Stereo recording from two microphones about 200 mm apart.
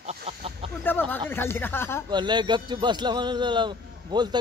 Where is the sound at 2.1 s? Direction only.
20° right (ahead or behind).